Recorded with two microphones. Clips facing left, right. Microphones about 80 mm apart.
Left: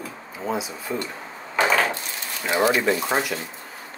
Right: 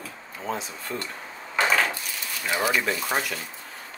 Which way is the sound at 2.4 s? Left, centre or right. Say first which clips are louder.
Left 5 dB; centre.